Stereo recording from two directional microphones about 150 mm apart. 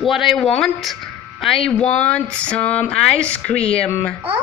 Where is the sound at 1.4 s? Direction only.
5° left (ahead or behind).